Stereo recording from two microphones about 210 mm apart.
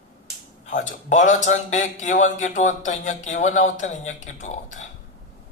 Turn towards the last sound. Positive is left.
turn(degrees=35)  # may be behind; listen again after turning